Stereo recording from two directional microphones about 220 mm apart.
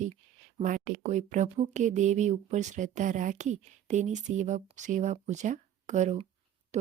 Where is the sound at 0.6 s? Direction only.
35° right (ahead or behind).